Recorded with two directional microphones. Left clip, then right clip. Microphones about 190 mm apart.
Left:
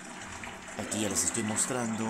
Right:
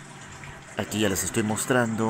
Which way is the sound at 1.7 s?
20° right (ahead or behind).